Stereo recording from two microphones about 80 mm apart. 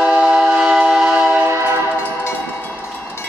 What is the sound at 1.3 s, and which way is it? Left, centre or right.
Train, right.